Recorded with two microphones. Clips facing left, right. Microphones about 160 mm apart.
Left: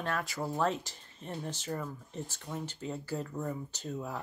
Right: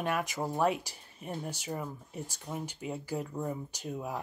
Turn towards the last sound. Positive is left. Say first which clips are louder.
# right 1 dB
turn(degrees=-15)  # may be behind; listen again after turning